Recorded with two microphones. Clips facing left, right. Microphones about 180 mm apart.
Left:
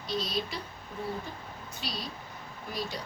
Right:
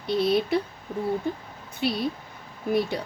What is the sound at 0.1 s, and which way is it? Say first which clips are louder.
Speech: right 11 dB; 60° right (ahead or behind).